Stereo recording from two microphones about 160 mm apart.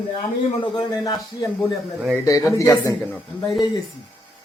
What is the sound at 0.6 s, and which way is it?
Speech, 30° left (ahead or behind).